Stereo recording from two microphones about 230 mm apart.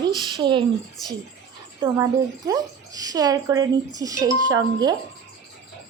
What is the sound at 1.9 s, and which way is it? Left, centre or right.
A child's voice, centre.